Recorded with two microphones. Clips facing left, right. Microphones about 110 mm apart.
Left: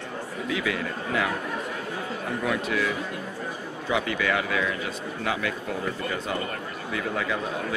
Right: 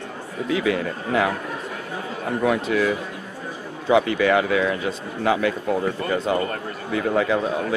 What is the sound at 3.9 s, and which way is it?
A man's voice, 30° right (ahead or behind).